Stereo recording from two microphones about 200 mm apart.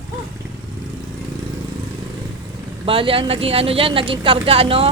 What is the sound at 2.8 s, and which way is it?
Speech, 25° right (ahead or behind).